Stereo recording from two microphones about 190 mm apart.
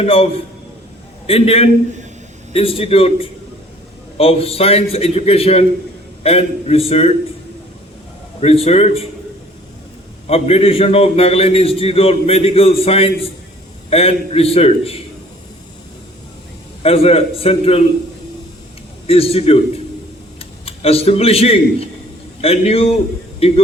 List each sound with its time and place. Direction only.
0.0 s a man's voice: 30° left (ahead or behind)
8.4 s a man's voice: 30° left (ahead or behind)
10.2 s a man's voice: 30° left (ahead or behind)
16.8 s a man's voice: 30° left (ahead or behind)
19.0 s a man's voice: 30° left (ahead or behind)